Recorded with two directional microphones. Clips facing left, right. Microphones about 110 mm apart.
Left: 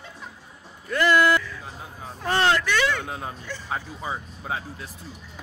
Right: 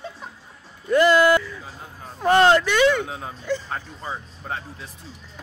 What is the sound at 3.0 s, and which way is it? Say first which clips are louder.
Speech: right 4 dB; centre (ahead or behind).